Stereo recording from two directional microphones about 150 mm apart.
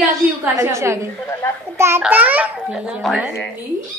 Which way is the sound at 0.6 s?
20° right (ahead or behind).